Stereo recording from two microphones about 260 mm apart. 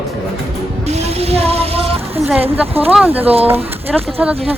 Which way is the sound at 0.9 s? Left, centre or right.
Right.